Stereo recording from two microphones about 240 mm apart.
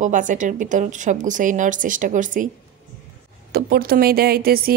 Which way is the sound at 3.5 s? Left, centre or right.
Right.